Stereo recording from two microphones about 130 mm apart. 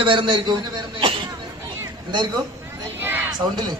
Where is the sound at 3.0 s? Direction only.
15° right (ahead or behind).